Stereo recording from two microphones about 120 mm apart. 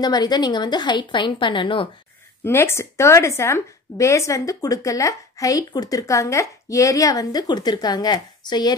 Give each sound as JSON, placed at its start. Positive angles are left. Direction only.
{"t": 0.0, "sound": "a woman's voice", "side_deg": 35}
{"t": 2.4, "sound": "a woman's voice", "side_deg": 20}